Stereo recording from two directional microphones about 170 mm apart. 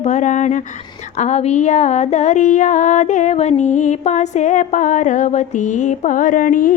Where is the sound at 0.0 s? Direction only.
45° left (ahead or behind).